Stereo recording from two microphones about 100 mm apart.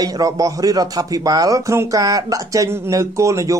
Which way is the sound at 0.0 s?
35° right (ahead or behind).